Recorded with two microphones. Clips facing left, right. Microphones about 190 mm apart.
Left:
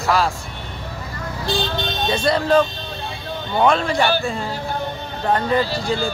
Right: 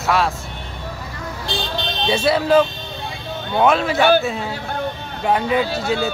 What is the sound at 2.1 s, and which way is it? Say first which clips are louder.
A man's voice: right 2 dB; 5° right (ahead or behind).